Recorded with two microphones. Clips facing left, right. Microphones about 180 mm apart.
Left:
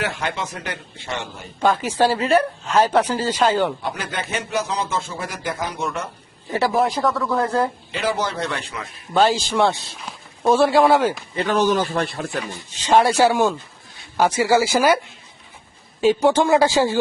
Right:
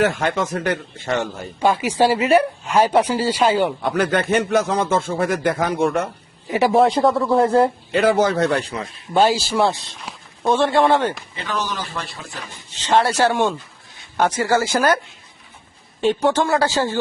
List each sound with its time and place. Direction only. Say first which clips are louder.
0.0 s speech: right 7 dB; 45° right (ahead or behind)
1.6 s speech: right 1 dB; 10° right (ahead or behind)
3.8 s speech: right 8 dB; 55° right (ahead or behind)
6.5 s a man's voice: right 3 dB; 15° right (ahead or behind)
6.7 s speech: right 7 dB; 25° right (ahead or behind)
7.9 s speech: right 8 dB; 50° right (ahead or behind)
9.1 s a man's voice: right 1 dB; 10° right (ahead or behind); by 11.2 s 5° left (ahead or behind)
11.3 s a man's voice: left 8 dB; 50° left (ahead or behind)
12.4 s speech: left 7 dB; 10° left (ahead or behind)
16.3 s speech: left 3 dB; 15° left (ahead or behind)